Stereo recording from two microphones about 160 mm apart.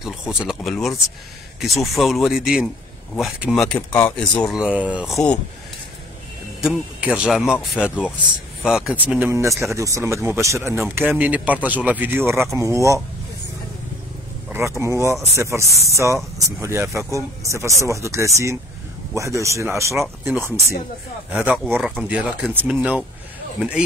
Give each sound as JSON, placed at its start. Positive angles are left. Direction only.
{"t": 0.0, "sound": "speech", "side_deg": -5}
{"t": 6.6, "sound": "speech", "side_deg": -5}
{"t": 14.8, "sound": "speech", "side_deg": -20}
{"t": 20.0, "sound": "speech", "side_deg": 0}